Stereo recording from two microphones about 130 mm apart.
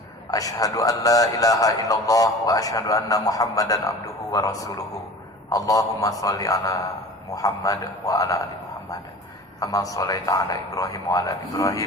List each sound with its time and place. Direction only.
0.3 s a man's voice: 25° left (ahead or behind)
9.6 s a man's voice: 25° left (ahead or behind)